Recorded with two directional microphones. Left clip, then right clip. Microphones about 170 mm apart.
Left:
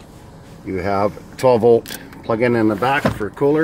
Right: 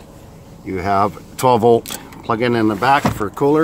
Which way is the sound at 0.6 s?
20° right (ahead or behind).